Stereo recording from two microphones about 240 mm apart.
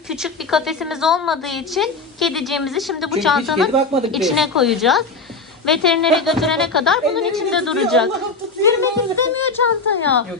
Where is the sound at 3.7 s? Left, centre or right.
Right.